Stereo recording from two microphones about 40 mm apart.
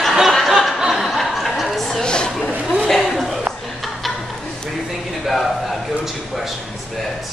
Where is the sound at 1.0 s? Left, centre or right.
Centre.